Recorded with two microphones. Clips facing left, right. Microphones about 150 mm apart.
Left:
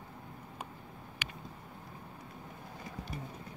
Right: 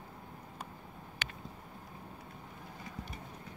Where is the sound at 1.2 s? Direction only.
10° left (ahead or behind).